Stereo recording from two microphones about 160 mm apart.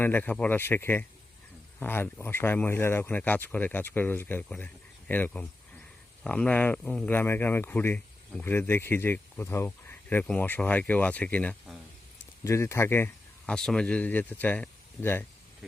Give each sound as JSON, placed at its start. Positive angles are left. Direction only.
{"t": 0.0, "sound": "speech", "side_deg": 10}
{"t": 13.4, "sound": "speech", "side_deg": 5}